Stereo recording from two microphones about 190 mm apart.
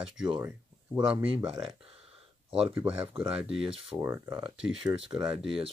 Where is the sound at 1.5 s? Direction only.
25° right (ahead or behind).